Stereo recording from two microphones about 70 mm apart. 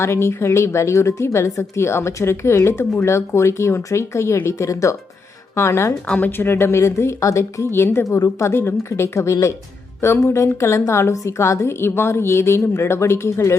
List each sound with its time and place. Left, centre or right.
0.0 s a woman's voice: left
6.1 s a woman's voice: left